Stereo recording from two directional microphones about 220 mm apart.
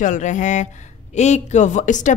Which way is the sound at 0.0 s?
35° left (ahead or behind).